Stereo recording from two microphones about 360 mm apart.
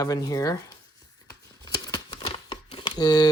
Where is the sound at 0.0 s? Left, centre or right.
Centre.